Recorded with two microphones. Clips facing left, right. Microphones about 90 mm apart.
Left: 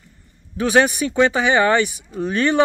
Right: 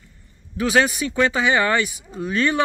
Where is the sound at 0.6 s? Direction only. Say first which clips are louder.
Left 3 dB; 25° left (ahead or behind).